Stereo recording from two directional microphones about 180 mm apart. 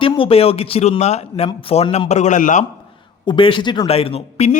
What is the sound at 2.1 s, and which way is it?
Speech, 40° left (ahead or behind).